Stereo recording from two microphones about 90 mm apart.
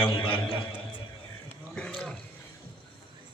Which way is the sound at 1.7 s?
10° left (ahead or behind).